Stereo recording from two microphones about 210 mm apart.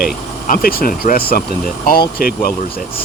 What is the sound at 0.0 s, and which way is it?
Speech, 45° left (ahead or behind).